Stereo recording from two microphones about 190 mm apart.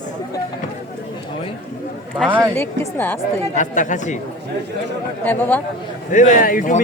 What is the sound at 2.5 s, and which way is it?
Speech, 10° left (ahead or behind).